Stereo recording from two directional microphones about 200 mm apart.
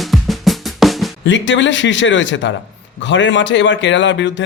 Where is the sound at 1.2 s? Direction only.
65° left (ahead or behind).